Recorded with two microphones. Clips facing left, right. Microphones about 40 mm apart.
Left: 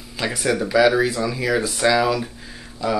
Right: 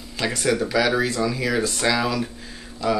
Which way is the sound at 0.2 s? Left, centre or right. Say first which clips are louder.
Even; centre.